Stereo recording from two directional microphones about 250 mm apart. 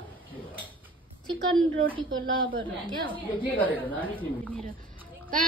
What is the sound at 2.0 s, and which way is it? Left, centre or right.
Speech, right.